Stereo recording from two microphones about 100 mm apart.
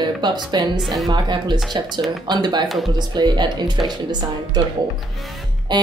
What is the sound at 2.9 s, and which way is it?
Speech, 45° right (ahead or behind).